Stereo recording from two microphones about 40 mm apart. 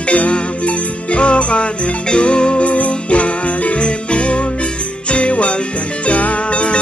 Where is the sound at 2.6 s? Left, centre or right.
Left.